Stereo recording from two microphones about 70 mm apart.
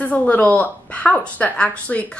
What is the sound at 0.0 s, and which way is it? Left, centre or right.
A woman's voice, left.